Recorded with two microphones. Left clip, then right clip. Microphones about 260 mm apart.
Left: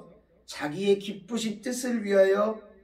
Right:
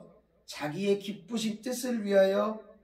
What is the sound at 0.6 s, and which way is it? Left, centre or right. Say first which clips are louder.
Speech: left 4 dB; centre.